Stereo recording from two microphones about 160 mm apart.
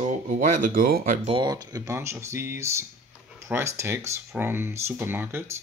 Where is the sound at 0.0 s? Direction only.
55° right (ahead or behind).